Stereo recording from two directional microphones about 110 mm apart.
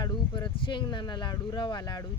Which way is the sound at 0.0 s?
40° left (ahead or behind).